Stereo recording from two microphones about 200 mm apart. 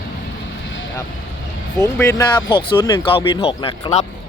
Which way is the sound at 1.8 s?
15° left (ahead or behind).